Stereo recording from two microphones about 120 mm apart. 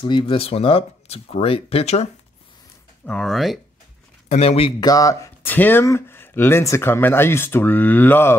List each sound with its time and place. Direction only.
0.0 s speech: 45° left (ahead or behind)
3.1 s speech: 5° left (ahead or behind)
4.3 s speech: 60° left (ahead or behind)
4.7 s speech: 30° left (ahead or behind)